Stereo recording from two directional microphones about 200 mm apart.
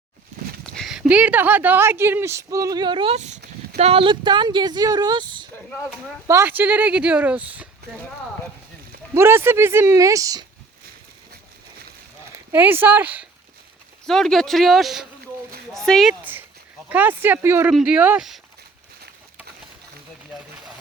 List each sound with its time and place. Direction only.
0.8 s speech: 5° right (ahead or behind); by 5.5 s 25° right (ahead or behind)
6.2 s speech: 10° right (ahead or behind)
9.1 s speech: 10° right (ahead or behind)
12.5 s speech: 10° right (ahead or behind)
14.1 s speech: centre (ahead or behind)